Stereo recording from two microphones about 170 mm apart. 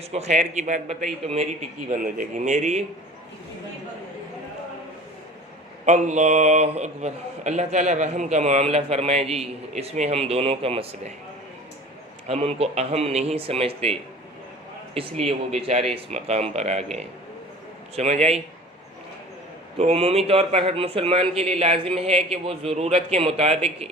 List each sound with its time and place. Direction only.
0.1 s speech: 40° right (ahead or behind)
5.8 s a man's voice: 45° right (ahead or behind)
12.3 s a man's voice: 35° right (ahead or behind)
14.9 s a man's voice: 35° right (ahead or behind)
19.8 s a man's voice: 35° right (ahead or behind)